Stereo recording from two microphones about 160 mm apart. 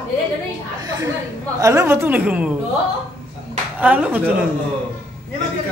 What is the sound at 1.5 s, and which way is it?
Speech, 15° right (ahead or behind).